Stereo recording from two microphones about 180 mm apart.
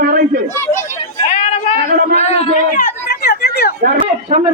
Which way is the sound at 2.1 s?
35° left (ahead or behind).